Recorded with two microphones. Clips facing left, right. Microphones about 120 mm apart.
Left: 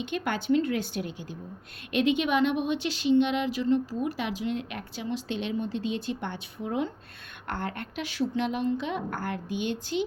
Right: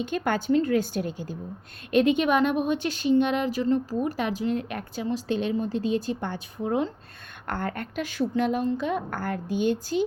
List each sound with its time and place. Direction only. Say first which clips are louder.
0.0 s a woman's voice: right 4 dB; 45° right (ahead or behind)